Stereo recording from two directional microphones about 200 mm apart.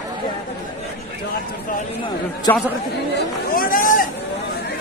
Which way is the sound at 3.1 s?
45° left (ahead or behind).